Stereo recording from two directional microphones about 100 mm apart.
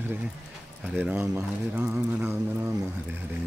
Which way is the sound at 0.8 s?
10° right (ahead or behind).